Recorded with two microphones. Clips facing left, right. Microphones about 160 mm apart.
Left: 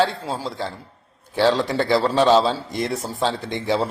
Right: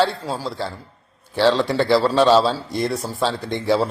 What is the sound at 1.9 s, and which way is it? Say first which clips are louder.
A man's voice: right 1 dB; 20° left (ahead or behind).